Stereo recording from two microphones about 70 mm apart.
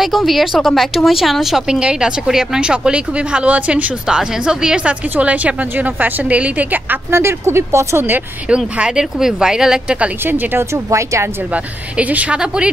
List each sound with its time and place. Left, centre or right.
0.0 s a woman's voice: centre; by 7.0 s right
7.1 s speech: right
8.5 s speech: centre
10.2 s speech: right
11.5 s a woman's voice: right